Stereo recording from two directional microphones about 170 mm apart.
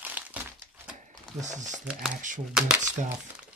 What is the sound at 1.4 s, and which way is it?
Speech, 45° right (ahead or behind).